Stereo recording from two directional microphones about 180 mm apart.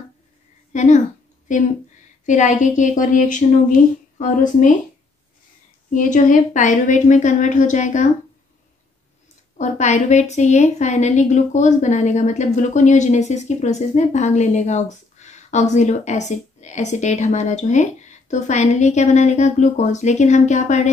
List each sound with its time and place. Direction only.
0.7 s speech: 40° left (ahead or behind)
2.2 s a woman's voice: 45° left (ahead or behind)
5.9 s a woman's voice: 45° left (ahead or behind)
9.6 s a woman's voice: 40° left (ahead or behind)